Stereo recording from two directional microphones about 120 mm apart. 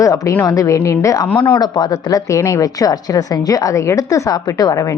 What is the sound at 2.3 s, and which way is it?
A woman's voice, 25° left (ahead or behind).